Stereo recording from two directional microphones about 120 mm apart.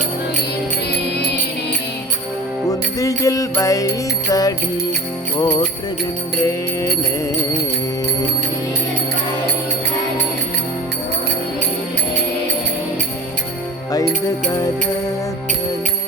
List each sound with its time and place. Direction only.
2.6 s music: 30° left (ahead or behind)
5.4 s jingle bell: 40° left (ahead or behind)
6.4 s music: 25° left (ahead or behind)